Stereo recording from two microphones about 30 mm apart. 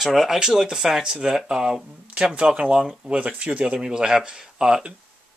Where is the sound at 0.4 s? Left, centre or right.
Centre; by 3.8 s right.